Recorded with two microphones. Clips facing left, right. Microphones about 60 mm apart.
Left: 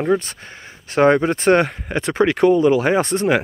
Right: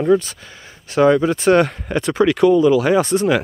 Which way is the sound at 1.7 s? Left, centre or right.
Centre.